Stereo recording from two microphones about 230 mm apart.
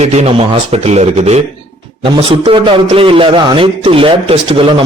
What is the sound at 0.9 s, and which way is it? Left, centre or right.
Speech, right.